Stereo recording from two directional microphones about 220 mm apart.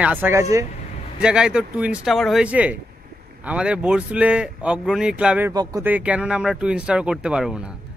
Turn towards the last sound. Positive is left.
turn(degrees=-5)  # may be behind; listen again after turning